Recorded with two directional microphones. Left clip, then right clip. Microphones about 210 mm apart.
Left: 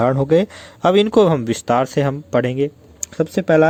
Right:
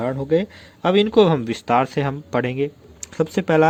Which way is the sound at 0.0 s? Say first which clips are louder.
Left 5 dB; 30° left (ahead or behind).